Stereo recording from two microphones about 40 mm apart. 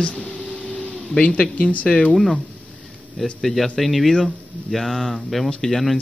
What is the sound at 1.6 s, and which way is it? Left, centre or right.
Speech, left.